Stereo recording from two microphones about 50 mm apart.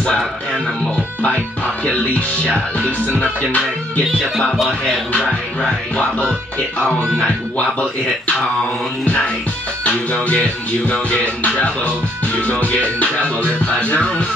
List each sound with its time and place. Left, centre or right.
1.9 s music: left
5.1 s music: left
9.0 s music: left